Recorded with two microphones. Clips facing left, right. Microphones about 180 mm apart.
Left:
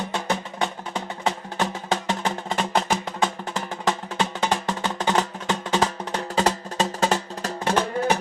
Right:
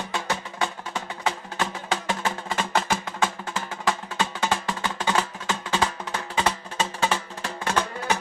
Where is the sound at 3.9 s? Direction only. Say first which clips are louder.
Left 2 dB; 20° left (ahead or behind).